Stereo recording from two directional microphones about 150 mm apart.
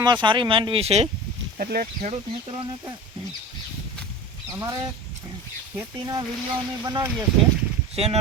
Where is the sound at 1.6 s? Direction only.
90° right.